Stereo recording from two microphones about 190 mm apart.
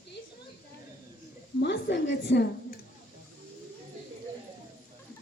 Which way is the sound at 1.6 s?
65° left (ahead or behind).